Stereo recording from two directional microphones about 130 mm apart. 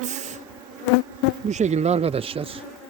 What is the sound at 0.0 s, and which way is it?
Bee, 65° right (ahead or behind).